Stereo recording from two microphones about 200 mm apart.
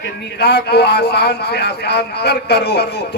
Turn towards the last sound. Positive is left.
turn(degrees=55)  # may be behind; listen again after turning